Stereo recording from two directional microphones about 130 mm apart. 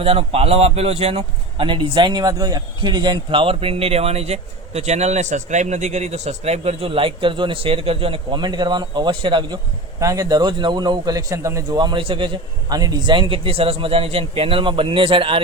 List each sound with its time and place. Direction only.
0.0 s a man's voice: 50° right (ahead or behind)
10.0 s a man's voice: 25° right (ahead or behind); by 15.4 s 40° right (ahead or behind)